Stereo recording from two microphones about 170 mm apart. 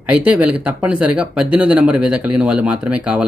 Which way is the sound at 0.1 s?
10° right (ahead or behind).